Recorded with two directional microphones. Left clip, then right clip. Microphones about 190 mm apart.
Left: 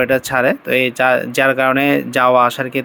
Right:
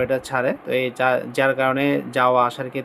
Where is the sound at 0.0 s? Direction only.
20° left (ahead or behind).